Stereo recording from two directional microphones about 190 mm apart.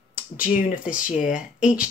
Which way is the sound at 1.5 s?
5° right (ahead or behind).